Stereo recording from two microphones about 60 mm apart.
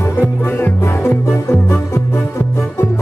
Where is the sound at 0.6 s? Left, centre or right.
Left.